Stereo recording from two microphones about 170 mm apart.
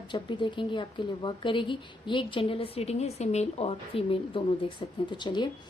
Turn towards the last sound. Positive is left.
turn(degrees=25)  # may be behind; listen again after turning